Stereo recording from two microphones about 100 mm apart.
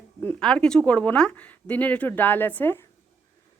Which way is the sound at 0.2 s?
10° left (ahead or behind).